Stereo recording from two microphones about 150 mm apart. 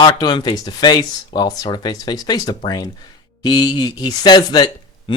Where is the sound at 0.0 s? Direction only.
30° left (ahead or behind).